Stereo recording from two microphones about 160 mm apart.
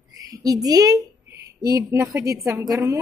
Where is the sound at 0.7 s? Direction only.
20° right (ahead or behind).